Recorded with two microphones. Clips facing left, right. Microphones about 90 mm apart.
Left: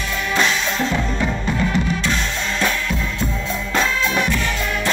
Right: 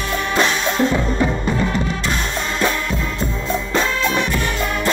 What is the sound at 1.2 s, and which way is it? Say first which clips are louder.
Music: right 2 dB; 20° right (ahead or behind).